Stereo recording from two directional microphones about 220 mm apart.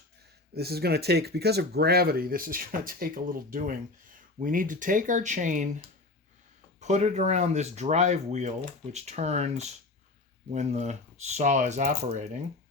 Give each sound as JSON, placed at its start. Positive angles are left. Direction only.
{"t": 0.5, "sound": "speech", "side_deg": -45}
{"t": 6.7, "sound": "speech", "side_deg": -30}